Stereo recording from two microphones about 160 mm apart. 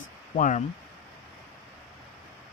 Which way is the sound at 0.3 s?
50° left (ahead or behind).